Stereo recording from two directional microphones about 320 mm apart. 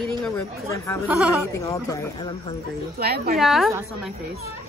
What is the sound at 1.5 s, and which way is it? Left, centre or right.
Speech, centre.